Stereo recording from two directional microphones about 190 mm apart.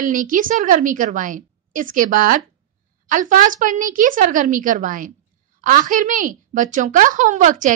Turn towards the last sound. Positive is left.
turn(degrees=-40)  # may be behind; listen again after turning